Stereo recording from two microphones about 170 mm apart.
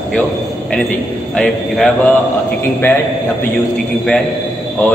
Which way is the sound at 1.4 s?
Centre (ahead or behind).